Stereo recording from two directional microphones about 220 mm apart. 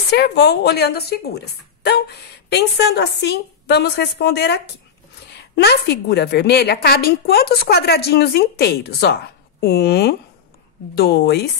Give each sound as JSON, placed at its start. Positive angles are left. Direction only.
{"t": 0.1, "sound": "a woman's voice", "side_deg": 50}